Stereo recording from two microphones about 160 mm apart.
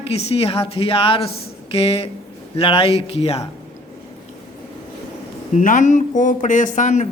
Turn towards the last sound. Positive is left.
turn(degrees=50)  # may be behind; listen again after turning